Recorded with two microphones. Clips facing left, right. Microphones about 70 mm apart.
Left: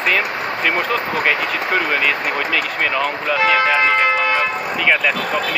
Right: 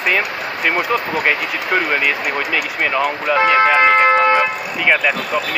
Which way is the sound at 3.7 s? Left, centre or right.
Right.